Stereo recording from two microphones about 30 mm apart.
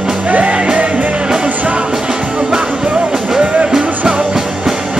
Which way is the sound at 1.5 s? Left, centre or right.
Right.